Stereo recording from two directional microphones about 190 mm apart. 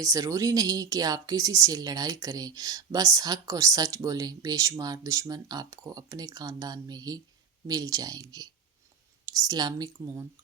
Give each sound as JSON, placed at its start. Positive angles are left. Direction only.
{"t": 0.0, "sound": "speech", "side_deg": -20}